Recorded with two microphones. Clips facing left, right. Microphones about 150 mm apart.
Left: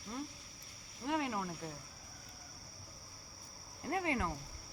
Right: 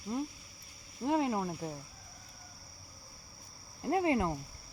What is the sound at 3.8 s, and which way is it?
Speech, 25° right (ahead or behind).